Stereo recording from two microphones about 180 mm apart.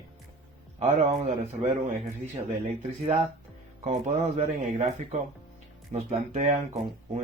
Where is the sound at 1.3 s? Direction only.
40° right (ahead or behind).